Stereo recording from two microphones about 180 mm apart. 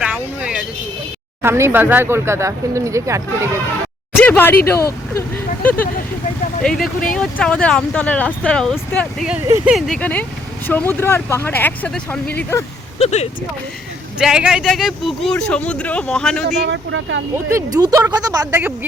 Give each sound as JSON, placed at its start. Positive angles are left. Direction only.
{"t": 0.0, "sound": "vehicle", "side_deg": -5}
{"t": 1.4, "sound": "speech", "side_deg": -15}
{"t": 4.2, "sound": "speech", "side_deg": 10}
{"t": 13.0, "sound": "speech", "side_deg": 40}
{"t": 14.2, "sound": "speech", "side_deg": -5}
{"t": 16.6, "sound": "speech", "side_deg": -85}
{"t": 17.3, "sound": "a woman's voice", "side_deg": -20}